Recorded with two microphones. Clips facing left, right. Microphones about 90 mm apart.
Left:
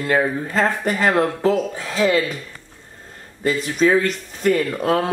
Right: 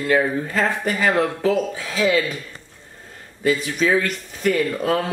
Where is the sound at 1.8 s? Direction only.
40° left (ahead or behind).